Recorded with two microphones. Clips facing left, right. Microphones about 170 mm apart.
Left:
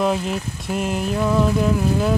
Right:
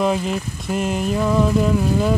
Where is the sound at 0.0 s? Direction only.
Centre (ahead or behind).